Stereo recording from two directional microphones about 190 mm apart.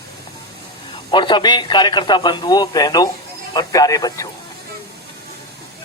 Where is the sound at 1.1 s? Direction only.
25° left (ahead or behind).